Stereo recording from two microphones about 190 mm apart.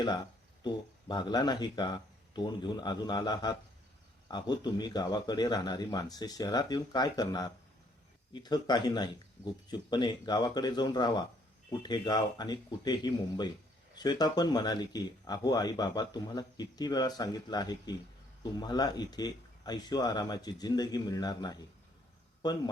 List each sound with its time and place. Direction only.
0.6 s speech: 25° left (ahead or behind)